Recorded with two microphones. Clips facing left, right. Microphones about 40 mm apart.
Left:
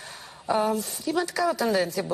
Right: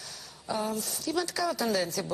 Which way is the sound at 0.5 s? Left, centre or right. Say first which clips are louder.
Left 8 dB; left.